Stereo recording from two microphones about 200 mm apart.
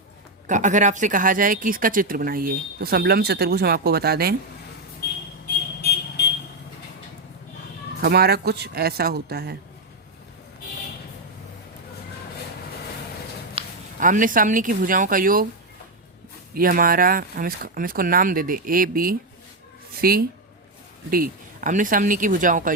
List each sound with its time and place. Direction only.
0.4 s speech: 40° right (ahead or behind)
8.0 s speech: 50° right (ahead or behind)
13.6 s a sound: 25° right (ahead or behind)
14.0 s speech: 40° right (ahead or behind)
16.6 s speech: 45° right (ahead or behind)